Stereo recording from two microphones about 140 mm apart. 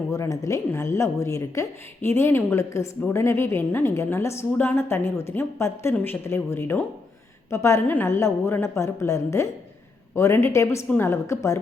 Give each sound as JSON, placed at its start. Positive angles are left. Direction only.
{"t": 0.1, "sound": "a woman's voice", "side_deg": 20}